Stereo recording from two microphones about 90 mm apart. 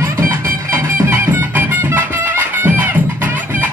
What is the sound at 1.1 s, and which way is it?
Music, 25° right (ahead or behind).